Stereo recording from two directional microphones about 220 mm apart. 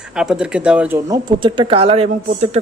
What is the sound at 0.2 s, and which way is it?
A man's voice, 5° right (ahead or behind).